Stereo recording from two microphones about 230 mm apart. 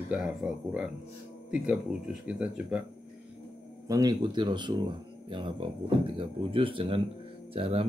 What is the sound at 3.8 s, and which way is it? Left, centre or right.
Speech, centre.